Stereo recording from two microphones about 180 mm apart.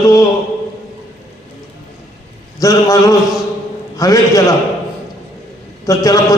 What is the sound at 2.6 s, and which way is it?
A man's voice, 20° left (ahead or behind).